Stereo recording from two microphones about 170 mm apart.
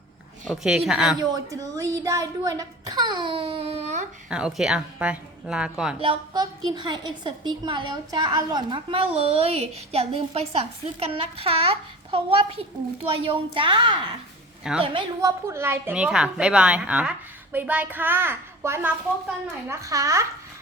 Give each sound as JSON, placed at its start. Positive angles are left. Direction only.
{"t": 0.4, "sound": "a woman's voice", "side_deg": 0}
{"t": 1.2, "sound": "speech", "side_deg": -20}
{"t": 4.3, "sound": "a woman's voice", "side_deg": -5}
{"t": 6.0, "sound": "a woman's voice", "side_deg": -25}
{"t": 14.6, "sound": "a woman's voice", "side_deg": -5}
{"t": 15.2, "sound": "a woman's voice", "side_deg": -15}